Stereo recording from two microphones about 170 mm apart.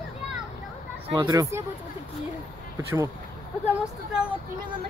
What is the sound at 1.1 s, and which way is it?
Speech, 25° right (ahead or behind).